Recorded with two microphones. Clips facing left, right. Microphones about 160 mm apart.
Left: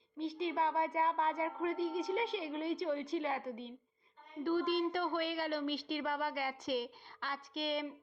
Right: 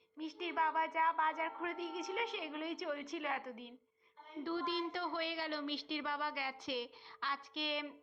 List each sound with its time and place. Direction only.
0.2 s a woman's voice: 30° left (ahead or behind)
4.4 s speech: 50° left (ahead or behind)